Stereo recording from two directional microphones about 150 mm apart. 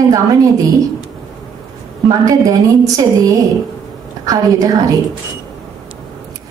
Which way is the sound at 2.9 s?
25° right (ahead or behind).